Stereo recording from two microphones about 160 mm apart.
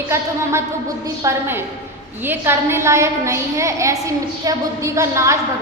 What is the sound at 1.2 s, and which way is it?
A woman's voice, 15° right (ahead or behind).